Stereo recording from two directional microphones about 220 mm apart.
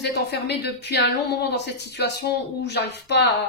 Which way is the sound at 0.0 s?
50° left (ahead or behind).